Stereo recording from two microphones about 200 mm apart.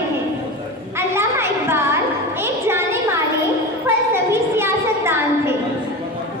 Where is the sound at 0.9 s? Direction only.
10° right (ahead or behind).